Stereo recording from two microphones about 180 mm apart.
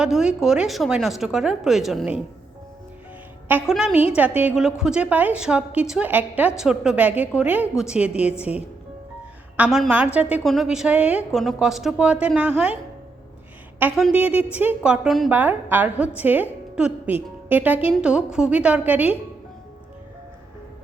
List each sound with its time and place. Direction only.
0.0 s a woman's voice: 5° right (ahead or behind)
3.5 s a woman's voice: 5° right (ahead or behind)